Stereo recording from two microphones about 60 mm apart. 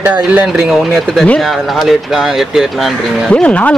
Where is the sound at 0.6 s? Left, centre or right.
Centre.